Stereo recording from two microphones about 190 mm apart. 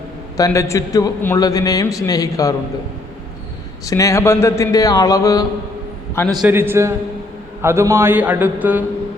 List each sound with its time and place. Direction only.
0.3 s a man's voice: 15° left (ahead or behind)
3.8 s speech: 15° left (ahead or behind)
6.4 s a man's voice: 10° right (ahead or behind)